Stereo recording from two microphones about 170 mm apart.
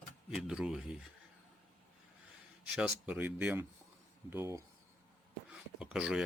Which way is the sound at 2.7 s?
5° right (ahead or behind).